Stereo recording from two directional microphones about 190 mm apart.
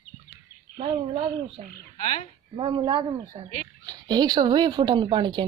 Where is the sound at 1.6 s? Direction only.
30° right (ahead or behind).